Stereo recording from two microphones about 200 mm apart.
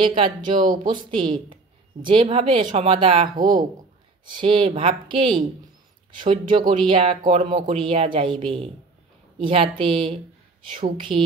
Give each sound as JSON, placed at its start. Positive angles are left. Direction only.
{"t": 0.0, "sound": "speech", "side_deg": -25}
{"t": 4.3, "sound": "speech", "side_deg": -25}